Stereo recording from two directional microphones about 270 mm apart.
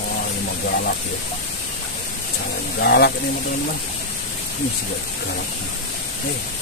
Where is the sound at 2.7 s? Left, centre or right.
Left.